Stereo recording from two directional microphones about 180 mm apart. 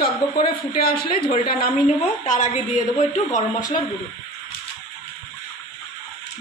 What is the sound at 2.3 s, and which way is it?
A woman's voice, 40° left (ahead or behind).